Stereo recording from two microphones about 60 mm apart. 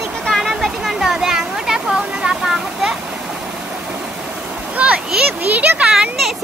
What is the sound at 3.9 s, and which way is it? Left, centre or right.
Stream, right.